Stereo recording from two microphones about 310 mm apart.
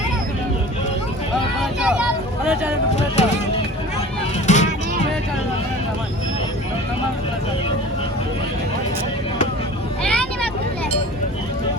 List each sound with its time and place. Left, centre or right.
1.8 s speech: centre
2.9 s speech: left
4.4 s music: left
10.0 s vehicle: centre